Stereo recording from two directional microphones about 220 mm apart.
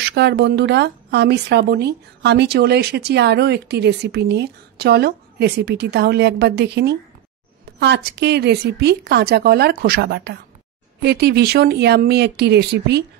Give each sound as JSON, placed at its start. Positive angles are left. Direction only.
{"t": 0.1, "sound": "speech", "side_deg": -50}